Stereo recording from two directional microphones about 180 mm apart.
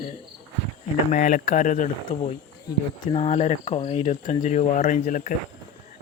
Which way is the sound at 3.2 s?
35° left (ahead or behind).